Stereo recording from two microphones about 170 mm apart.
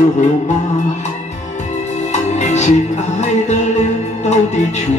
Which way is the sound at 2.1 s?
40° left (ahead or behind).